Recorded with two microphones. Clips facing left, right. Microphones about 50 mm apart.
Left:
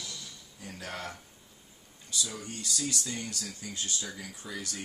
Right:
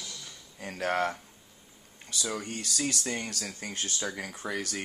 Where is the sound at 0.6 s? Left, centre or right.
Right.